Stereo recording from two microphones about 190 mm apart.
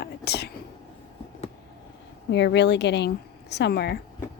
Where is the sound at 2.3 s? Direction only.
65° left (ahead or behind).